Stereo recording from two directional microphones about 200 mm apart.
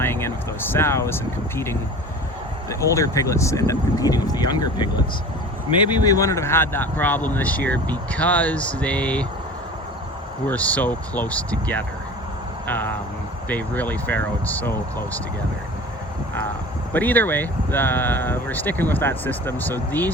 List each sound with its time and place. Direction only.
0.0 s speech: 10° left (ahead or behind)
6.1 s speech: 15° left (ahead or behind)
10.4 s speech: 5° left (ahead or behind)
12.6 s speech: 10° left (ahead or behind)
16.9 s speech: 10° left (ahead or behind)